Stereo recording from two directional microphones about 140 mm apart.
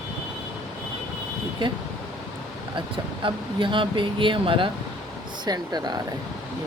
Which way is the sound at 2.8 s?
35° right (ahead or behind).